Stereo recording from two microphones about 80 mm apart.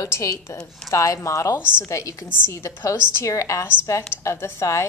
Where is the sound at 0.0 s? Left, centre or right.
Left.